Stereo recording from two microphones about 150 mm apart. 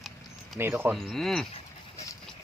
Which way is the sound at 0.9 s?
5° left (ahead or behind).